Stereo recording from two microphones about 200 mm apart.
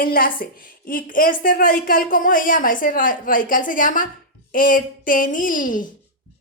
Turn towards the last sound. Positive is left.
turn(degrees=40)  # may be behind; listen again after turning